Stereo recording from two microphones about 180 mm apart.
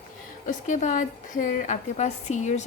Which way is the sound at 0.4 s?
45° left (ahead or behind).